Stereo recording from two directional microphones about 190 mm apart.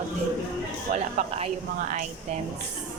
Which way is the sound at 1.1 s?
40° right (ahead or behind).